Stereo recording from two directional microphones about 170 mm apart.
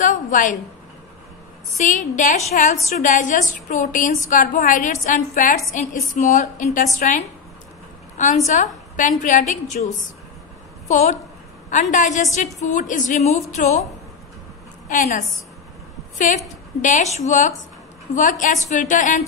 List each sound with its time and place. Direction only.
0.0 s a sound: 50° left (ahead or behind)
1.8 s a woman's voice: 45° left (ahead or behind)
8.5 s a woman's voice: 45° left (ahead or behind)
14.9 s a woman's voice: 45° left (ahead or behind)